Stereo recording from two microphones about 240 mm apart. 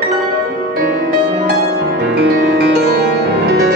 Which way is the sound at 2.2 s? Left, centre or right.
Right.